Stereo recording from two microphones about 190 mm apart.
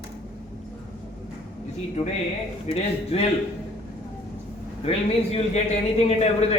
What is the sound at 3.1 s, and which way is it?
Speech, 35° left (ahead or behind).